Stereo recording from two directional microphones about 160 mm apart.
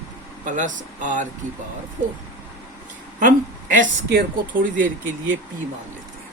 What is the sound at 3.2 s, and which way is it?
A woman's voice, 55° right (ahead or behind).